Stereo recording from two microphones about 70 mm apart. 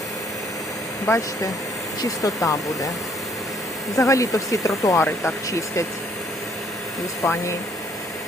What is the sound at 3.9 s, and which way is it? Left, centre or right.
Speech, left.